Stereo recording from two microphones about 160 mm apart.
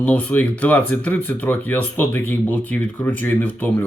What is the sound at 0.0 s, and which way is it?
Speech, 10° left (ahead or behind).